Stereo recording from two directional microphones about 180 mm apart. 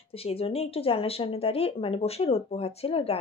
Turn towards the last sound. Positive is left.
turn(degrees=35)  # may be behind; listen again after turning